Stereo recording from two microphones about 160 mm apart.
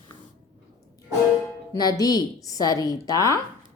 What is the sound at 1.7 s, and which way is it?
Speech, 25° left (ahead or behind).